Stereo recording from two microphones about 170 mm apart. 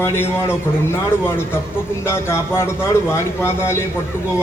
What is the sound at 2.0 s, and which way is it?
A man's voice, 15° left (ahead or behind).